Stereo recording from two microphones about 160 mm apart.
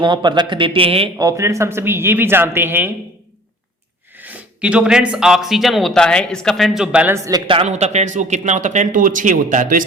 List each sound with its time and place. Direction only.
0.0 s a man's voice: 30° right (ahead or behind)
1.2 s speech: 20° right (ahead or behind)
4.2 s speech: 10° right (ahead or behind)
7.3 s speech: 30° right (ahead or behind); by 9.8 s 55° right (ahead or behind)